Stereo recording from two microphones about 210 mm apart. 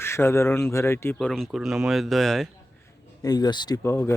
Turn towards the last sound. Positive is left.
turn(degrees=10)  # may be behind; listen again after turning